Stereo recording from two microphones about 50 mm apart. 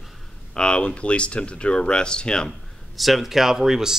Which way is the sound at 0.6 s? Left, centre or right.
Centre.